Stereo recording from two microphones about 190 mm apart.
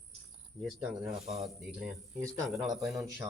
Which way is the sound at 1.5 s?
Centre (ahead or behind).